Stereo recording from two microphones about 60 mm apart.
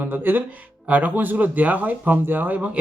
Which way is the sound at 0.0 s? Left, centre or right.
Right.